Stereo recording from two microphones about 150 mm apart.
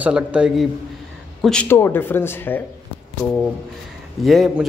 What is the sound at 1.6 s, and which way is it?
Speech, 15° left (ahead or behind).